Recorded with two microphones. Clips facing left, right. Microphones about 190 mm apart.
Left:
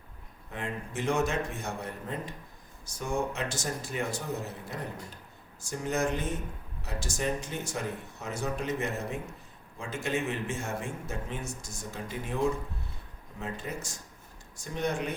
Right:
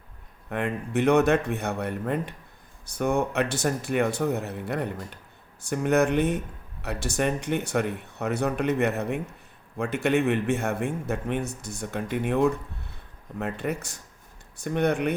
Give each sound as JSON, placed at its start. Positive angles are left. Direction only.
{"t": 0.5, "sound": "a man's voice", "side_deg": -65}